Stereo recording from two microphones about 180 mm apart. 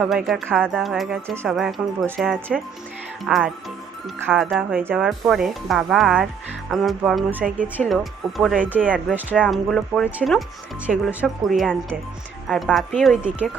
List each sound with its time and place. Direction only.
0.0 s speech: centre (ahead or behind)
4.5 s speech: 10° right (ahead or behind)